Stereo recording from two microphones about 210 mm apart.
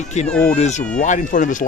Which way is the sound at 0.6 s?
35° left (ahead or behind).